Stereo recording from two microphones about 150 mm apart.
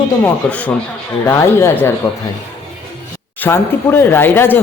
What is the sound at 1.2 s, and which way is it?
Speech, 15° left (ahead or behind).